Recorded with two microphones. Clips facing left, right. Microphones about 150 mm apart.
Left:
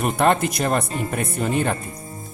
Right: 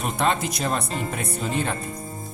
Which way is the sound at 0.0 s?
55° left (ahead or behind).